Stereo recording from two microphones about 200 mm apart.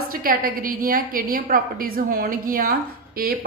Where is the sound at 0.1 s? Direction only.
45° right (ahead or behind).